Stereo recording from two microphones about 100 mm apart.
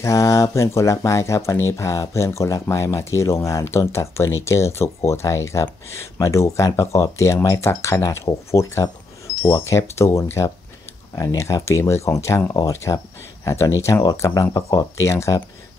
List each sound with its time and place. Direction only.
0.0 s speech: 30° left (ahead or behind)